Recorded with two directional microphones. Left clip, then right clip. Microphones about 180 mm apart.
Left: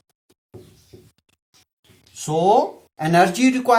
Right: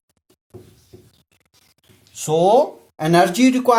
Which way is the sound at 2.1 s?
40° right (ahead or behind).